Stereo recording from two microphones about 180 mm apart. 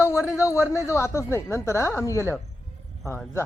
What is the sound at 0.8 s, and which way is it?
Speech, 15° left (ahead or behind).